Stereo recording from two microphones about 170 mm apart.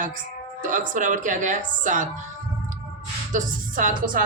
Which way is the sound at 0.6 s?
50° right (ahead or behind).